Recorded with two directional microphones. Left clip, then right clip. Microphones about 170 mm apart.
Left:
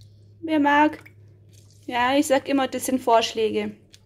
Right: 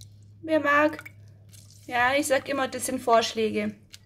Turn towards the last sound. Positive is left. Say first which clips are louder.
# left 3 dB
turn(degrees=30)  # may be behind; listen again after turning